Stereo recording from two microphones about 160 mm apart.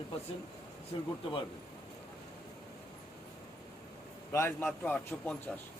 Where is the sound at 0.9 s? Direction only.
25° left (ahead or behind).